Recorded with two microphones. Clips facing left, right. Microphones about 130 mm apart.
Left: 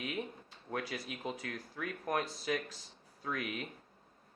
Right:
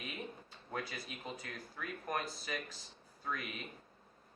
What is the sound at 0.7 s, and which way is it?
Speech, 70° left (ahead or behind).